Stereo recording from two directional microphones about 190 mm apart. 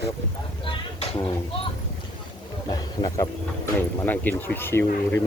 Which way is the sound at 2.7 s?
20° left (ahead or behind).